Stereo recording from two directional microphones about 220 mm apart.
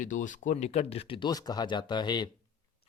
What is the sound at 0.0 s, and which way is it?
Speech, 35° left (ahead or behind).